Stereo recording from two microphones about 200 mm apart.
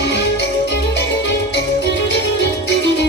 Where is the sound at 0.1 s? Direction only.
60° left (ahead or behind).